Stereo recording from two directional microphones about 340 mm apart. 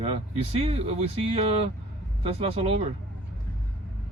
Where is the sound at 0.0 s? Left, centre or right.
Centre.